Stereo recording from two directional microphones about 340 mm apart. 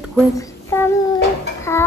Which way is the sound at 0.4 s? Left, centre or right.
Centre.